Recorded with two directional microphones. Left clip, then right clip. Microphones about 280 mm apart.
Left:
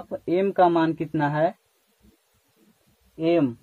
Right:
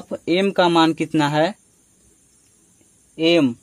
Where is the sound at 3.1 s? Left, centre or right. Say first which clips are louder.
Right 5 dB; right.